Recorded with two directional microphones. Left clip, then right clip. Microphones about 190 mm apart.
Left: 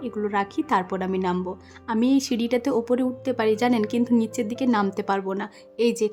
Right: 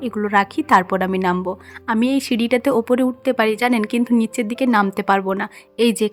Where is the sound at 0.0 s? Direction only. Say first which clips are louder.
Right 8 dB; 25° right (ahead or behind).